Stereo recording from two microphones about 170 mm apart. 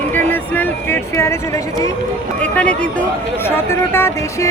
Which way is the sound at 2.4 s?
5° left (ahead or behind).